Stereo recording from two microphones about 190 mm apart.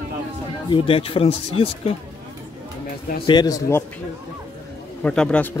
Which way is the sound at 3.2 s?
20° left (ahead or behind).